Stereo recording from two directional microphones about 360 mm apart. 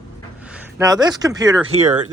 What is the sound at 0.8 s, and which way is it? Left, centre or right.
Speech, centre.